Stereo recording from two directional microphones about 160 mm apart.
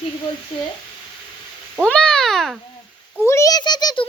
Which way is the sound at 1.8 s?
5° left (ahead or behind).